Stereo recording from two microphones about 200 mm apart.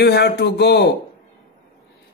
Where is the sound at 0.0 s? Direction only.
60° left (ahead or behind).